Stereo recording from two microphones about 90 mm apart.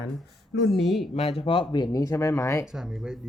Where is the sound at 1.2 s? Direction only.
90° left; by 1.8 s 65° left (ahead or behind).